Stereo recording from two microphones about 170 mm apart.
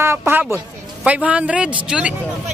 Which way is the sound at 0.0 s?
15° right (ahead or behind).